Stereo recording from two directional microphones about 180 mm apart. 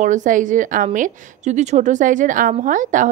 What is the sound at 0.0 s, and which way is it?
A woman's voice, 45° right (ahead or behind).